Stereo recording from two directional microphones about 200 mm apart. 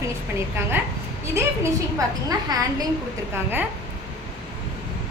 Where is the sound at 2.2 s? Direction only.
20° right (ahead or behind).